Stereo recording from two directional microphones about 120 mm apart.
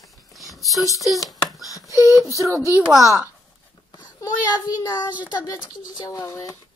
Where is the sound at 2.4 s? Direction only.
25° right (ahead or behind).